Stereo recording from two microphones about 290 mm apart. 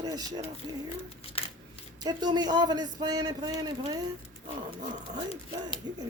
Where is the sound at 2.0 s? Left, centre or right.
Centre.